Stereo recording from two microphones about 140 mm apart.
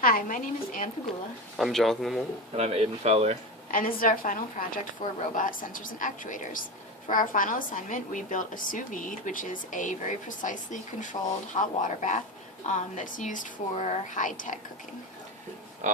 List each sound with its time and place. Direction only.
0.0 s a woman's voice: 85° left
1.5 s speech: centre (ahead or behind)
2.6 s speech: 50° right (ahead or behind)
3.7 s a woman's voice: 85° left; by 14.6 s 70° left (ahead or behind)
15.8 s a sound: 60° right (ahead or behind)